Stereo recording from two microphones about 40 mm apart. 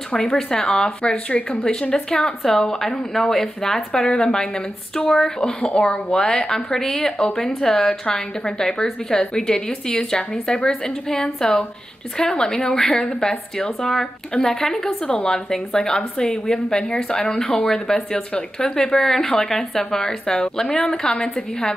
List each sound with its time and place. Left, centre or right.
0.2 s a woman's voice: centre
5.4 s a woman's voice: left